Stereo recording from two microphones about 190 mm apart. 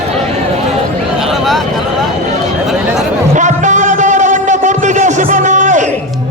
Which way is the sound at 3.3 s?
40° right (ahead or behind).